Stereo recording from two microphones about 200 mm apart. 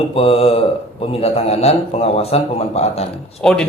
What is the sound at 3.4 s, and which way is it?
Speech, 5° left (ahead or behind).